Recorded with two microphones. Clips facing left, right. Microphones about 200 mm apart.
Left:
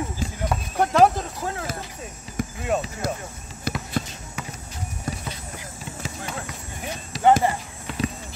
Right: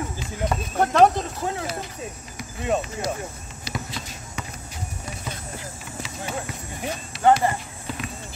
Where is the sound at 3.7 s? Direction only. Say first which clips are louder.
Left 3 dB; 55° left (ahead or behind).